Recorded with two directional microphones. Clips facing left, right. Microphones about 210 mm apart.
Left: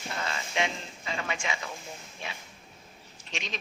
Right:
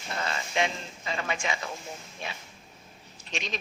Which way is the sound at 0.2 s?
40° right (ahead or behind).